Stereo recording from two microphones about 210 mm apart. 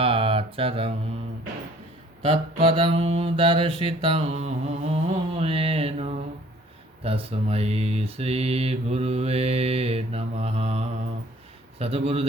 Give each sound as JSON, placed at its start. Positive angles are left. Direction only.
{"t": 0.0, "sound": "mantra", "side_deg": -25}
{"t": 2.6, "sound": "mantra", "side_deg": -25}